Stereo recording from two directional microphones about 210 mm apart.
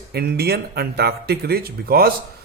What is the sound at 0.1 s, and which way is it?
Speech, 50° right (ahead or behind).